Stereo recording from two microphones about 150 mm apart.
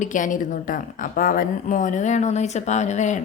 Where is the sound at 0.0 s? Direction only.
60° left (ahead or behind).